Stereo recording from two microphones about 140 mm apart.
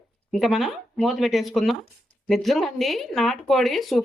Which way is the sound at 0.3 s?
Centre (ahead or behind).